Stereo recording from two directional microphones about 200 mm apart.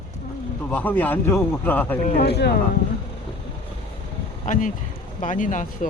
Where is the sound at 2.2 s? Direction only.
55° left (ahead or behind).